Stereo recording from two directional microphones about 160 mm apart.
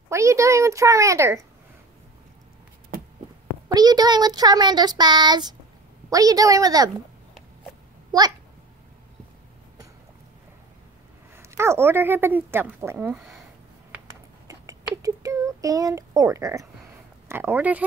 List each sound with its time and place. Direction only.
0.1 s a woman's voice: 20° right (ahead or behind)
3.6 s child singing: 25° right (ahead or behind)
11.3 s a woman's voice: 15° right (ahead or behind)
14.5 s a sound: 20° right (ahead or behind)
17.3 s a woman's voice: 15° right (ahead or behind)